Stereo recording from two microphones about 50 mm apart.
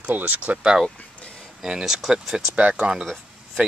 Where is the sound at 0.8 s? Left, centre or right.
Centre.